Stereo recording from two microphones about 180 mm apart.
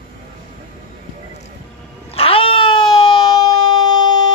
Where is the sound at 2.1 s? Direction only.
30° left (ahead or behind).